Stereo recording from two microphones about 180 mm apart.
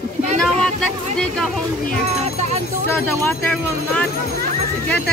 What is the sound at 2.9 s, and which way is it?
Speech, 10° left (ahead or behind).